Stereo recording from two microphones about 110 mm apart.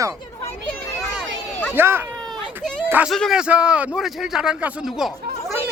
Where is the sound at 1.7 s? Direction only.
20° right (ahead or behind).